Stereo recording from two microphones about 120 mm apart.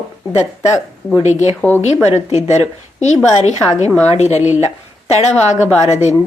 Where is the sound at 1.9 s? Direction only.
65° left (ahead or behind).